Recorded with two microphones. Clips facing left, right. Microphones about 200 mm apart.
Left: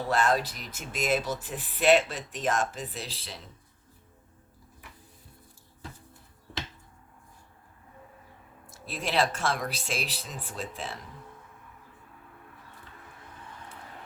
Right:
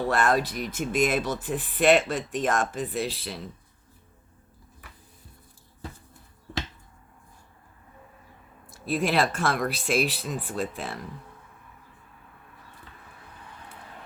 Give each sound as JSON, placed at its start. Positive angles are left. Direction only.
{"t": 0.1, "sound": "speech", "side_deg": -55}
{"t": 8.7, "sound": "speech", "side_deg": -60}